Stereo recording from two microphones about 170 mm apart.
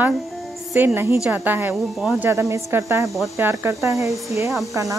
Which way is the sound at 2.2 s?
20° right (ahead or behind).